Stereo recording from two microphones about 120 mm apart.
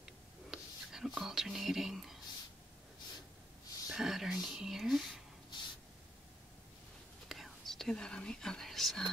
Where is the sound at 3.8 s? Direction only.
5° right (ahead or behind).